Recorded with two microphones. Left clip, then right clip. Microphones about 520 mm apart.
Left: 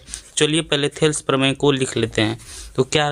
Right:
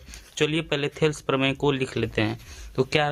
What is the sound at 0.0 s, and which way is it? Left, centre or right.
Speech, right.